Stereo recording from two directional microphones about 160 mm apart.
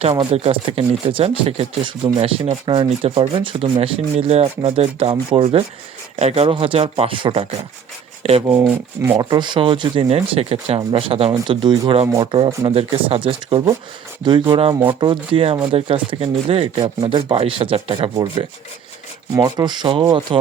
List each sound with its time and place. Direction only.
0.0 s speech: 35° right (ahead or behind)
8.5 s rub: 15° right (ahead or behind)
9.1 s speech: 30° right (ahead or behind)